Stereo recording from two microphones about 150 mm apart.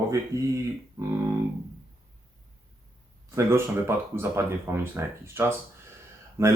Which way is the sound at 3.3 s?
15° right (ahead or behind).